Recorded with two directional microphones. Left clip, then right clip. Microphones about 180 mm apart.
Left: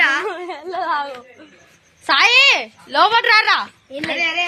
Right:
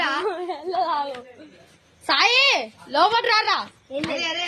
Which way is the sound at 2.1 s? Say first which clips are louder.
Left 5 dB; 10° left (ahead or behind).